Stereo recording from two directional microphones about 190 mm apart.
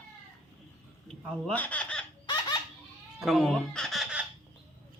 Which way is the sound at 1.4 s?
5° left (ahead or behind).